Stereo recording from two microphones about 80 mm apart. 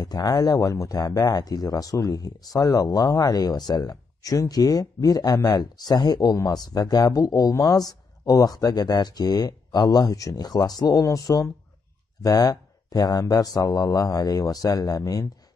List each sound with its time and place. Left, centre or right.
0.0 s speech: left